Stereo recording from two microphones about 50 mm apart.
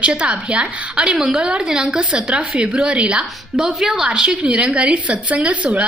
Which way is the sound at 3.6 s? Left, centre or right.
Centre.